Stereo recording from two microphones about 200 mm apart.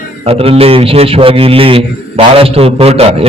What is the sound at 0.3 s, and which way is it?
A man's voice, 30° right (ahead or behind).